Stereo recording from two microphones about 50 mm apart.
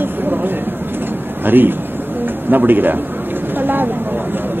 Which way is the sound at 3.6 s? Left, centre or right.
Right.